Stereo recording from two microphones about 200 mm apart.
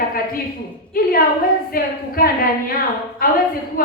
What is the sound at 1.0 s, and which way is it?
Speech, 45° left (ahead or behind).